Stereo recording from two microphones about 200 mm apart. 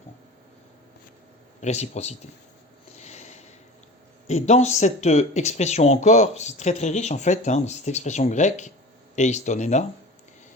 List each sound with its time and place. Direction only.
1.6 s speech: 35° left (ahead or behind)
2.9 s a sound: 35° left (ahead or behind)
4.3 s speech: 35° left (ahead or behind)